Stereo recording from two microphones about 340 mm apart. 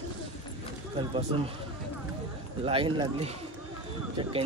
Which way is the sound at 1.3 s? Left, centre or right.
Centre.